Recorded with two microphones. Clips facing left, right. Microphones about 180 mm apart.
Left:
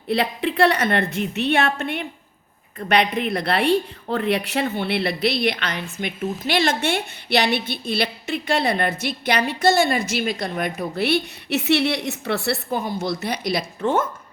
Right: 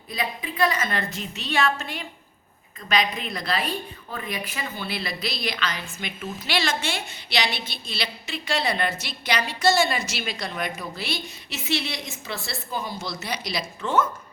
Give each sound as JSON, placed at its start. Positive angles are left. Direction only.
{"t": 0.1, "sound": "a woman's voice", "side_deg": 70}